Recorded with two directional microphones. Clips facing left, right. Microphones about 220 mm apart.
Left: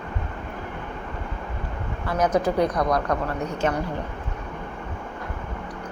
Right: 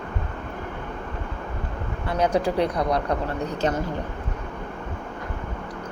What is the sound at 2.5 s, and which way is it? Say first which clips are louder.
Speech: left 1 dB; 30° right (ahead or behind).